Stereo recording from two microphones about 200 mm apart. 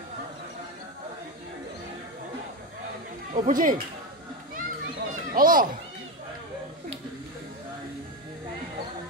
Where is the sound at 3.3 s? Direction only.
40° right (ahead or behind).